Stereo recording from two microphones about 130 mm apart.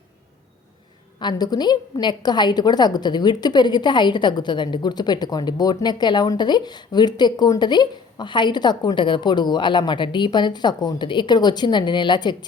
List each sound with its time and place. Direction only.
1.2 s a woman's voice: 35° left (ahead or behind)